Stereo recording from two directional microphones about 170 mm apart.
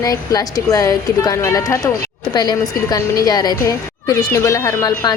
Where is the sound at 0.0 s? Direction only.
20° left (ahead or behind).